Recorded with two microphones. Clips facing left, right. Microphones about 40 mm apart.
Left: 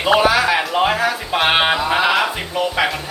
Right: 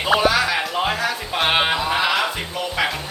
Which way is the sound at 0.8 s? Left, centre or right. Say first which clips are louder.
Left 5 dB; centre.